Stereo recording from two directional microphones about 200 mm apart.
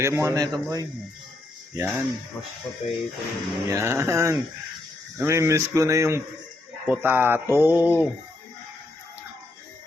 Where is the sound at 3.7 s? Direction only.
15° right (ahead or behind).